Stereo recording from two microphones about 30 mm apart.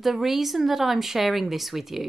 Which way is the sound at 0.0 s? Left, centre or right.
Centre.